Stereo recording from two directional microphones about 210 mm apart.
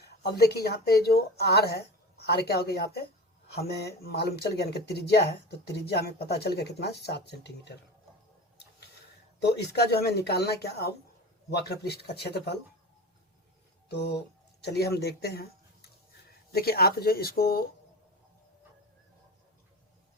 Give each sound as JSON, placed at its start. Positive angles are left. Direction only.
{"t": 0.0, "sound": "speech", "side_deg": 50}
{"t": 9.5, "sound": "speech", "side_deg": 50}
{"t": 13.8, "sound": "speech", "side_deg": 50}
{"t": 16.5, "sound": "speech", "side_deg": 45}